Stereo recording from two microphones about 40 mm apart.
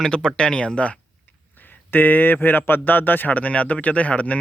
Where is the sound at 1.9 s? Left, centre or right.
Left.